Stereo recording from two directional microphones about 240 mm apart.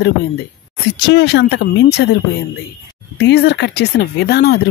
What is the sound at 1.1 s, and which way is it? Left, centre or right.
Speech, left.